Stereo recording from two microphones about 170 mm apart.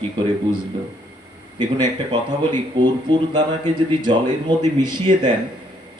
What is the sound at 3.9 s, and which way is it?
Speech, 25° right (ahead or behind).